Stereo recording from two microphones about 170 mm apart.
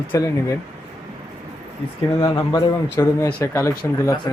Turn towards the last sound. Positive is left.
turn(degrees=15)  # may be behind; listen again after turning